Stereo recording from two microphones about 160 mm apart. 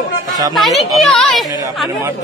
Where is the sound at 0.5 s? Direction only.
Centre (ahead or behind).